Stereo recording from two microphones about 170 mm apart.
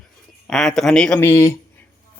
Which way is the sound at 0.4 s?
Centre (ahead or behind).